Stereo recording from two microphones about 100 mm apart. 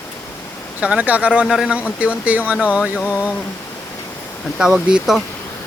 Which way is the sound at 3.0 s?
15° left (ahead or behind).